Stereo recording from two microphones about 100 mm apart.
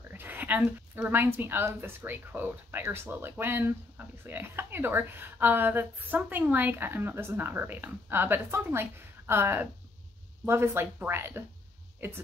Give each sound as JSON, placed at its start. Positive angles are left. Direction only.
{"t": 0.1, "sound": "a woman's voice", "side_deg": -20}